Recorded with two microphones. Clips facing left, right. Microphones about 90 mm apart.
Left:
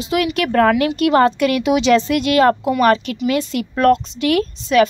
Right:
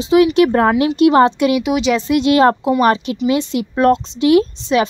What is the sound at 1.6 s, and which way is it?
Speech, 5° right (ahead or behind).